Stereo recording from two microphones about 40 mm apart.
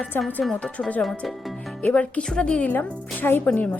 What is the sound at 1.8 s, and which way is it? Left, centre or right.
Speech, left.